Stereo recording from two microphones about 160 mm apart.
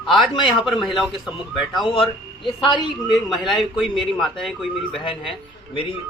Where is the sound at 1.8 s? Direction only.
30° left (ahead or behind).